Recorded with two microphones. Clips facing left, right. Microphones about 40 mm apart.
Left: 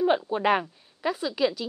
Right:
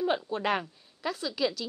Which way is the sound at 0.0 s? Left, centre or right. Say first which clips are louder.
Left 6 dB; centre.